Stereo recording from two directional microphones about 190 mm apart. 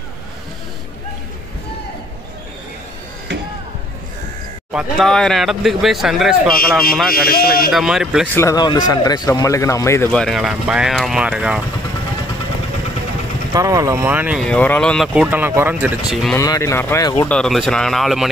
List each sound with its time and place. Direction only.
4.7 s speech: centre (ahead or behind)
7.2 s a man's voice: 55° left (ahead or behind)
7.7 s speech: centre (ahead or behind)
8.4 s speech: 20° left (ahead or behind); by 11.6 s 5° right (ahead or behind)
13.5 s speech: 20° right (ahead or behind)
14.4 s speech: 5° left (ahead or behind)
16.3 s speech: 15° left (ahead or behind)
17.3 s speech: centre (ahead or behind)